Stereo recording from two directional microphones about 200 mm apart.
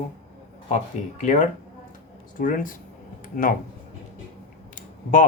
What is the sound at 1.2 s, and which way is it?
Speech, 35° left (ahead or behind).